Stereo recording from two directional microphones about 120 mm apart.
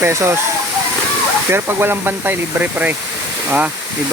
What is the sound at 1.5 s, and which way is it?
Speech, 20° right (ahead or behind).